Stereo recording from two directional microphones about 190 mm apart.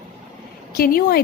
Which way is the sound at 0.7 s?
50° left (ahead or behind).